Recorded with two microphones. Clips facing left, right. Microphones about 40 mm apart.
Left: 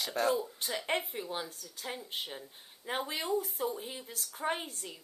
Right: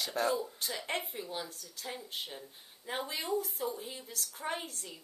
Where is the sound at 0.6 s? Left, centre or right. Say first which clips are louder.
Left 3 dB; centre.